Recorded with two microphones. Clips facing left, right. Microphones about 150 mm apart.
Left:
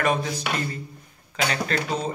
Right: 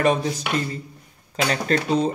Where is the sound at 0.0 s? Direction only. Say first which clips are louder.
Right 4 dB; 35° right (ahead or behind).